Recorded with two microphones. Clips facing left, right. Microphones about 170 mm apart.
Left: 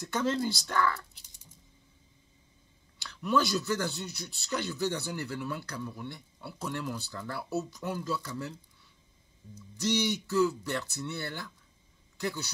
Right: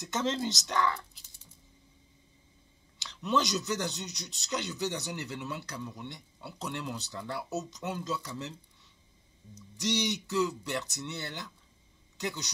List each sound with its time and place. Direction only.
0.0 s speech: 25° right (ahead or behind)
3.0 s speech: 20° right (ahead or behind)
9.8 s speech: 15° right (ahead or behind)